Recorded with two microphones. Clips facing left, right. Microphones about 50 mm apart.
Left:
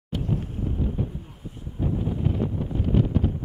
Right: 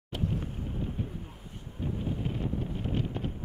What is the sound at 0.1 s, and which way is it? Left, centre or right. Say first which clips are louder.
Wind noise: left 5 dB; centre.